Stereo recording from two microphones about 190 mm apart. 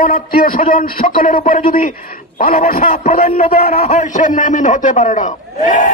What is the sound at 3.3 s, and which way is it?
A man's voice, 35° left (ahead or behind).